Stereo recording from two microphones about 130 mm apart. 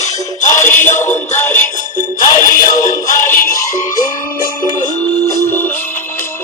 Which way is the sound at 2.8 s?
75° left (ahead or behind).